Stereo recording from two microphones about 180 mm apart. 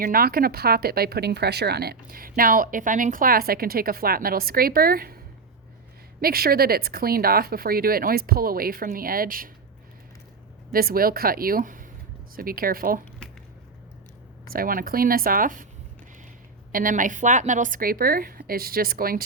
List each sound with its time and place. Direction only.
0.0 s speech: 55° right (ahead or behind)
6.2 s speech: 55° right (ahead or behind)
10.7 s a woman's voice: 55° right (ahead or behind)
14.4 s a woman's voice: 55° right (ahead or behind)
16.7 s a woman's voice: 50° right (ahead or behind)